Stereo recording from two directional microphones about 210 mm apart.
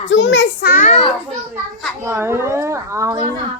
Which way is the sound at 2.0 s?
10° right (ahead or behind).